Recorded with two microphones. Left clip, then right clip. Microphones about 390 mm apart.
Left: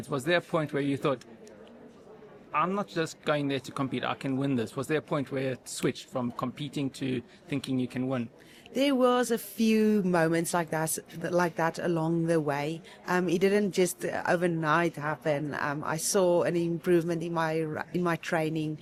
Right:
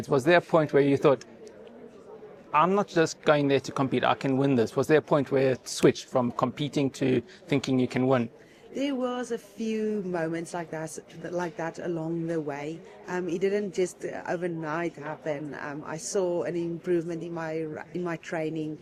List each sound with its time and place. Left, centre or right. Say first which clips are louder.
0.0 s a man's voice: right 6 dB; centre
2.5 s a man's voice: right 6 dB; centre
8.7 s speech: left 5 dB; left